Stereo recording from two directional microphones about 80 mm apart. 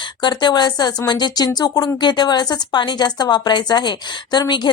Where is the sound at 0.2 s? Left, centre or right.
Left.